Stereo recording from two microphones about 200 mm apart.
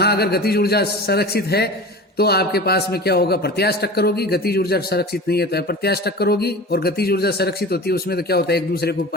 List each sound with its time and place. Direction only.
0.0 s a man's voice: 50° left (ahead or behind)